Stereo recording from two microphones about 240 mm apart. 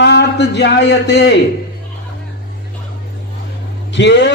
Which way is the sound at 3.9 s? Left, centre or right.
Left.